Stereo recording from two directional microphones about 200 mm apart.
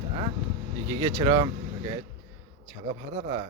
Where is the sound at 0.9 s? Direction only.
20° right (ahead or behind).